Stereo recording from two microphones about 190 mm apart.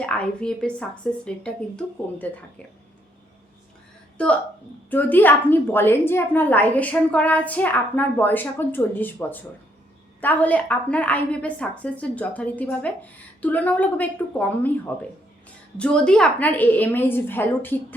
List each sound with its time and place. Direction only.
0.0 s a woman's voice: 5° left (ahead or behind)
4.9 s a woman's voice: 10° left (ahead or behind)